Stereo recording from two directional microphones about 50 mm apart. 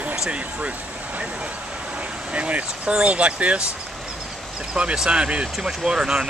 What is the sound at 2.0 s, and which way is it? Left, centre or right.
Vehicle, right.